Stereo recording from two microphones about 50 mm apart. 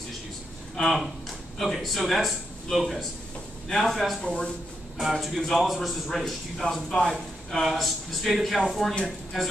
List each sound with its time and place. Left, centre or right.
1.6 s a man's voice: centre
4.2 s speech: centre
4.9 s a man's voice: centre